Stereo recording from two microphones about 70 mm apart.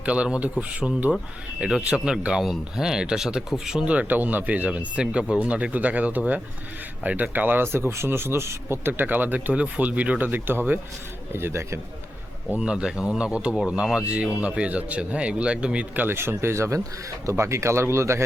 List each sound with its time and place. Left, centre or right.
0.0 s speech: centre; by 8.9 s right
8.9 s speech: right
12.5 s speech: centre
13.5 s speech: centre
13.7 s speech: centre
16.0 s speech: right